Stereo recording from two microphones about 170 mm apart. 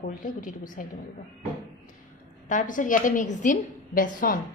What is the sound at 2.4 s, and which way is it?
Speech, 50° left (ahead or behind).